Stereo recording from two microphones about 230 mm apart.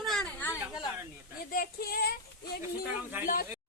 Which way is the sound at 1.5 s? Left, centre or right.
Left.